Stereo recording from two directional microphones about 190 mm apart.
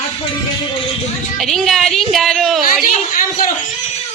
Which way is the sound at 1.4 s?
Centre (ahead or behind).